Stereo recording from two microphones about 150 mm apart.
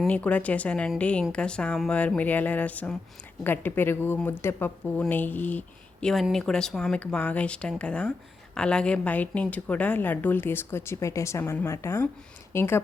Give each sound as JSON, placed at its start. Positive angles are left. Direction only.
{"t": 0.0, "sound": "speech", "side_deg": 10}